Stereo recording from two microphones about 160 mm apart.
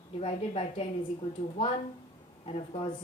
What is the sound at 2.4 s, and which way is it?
Speech, 35° left (ahead or behind).